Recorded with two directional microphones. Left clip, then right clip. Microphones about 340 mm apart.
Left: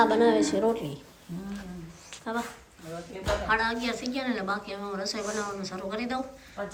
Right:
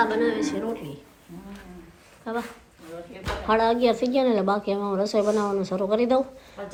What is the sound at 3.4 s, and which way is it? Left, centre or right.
A woman's voice, centre.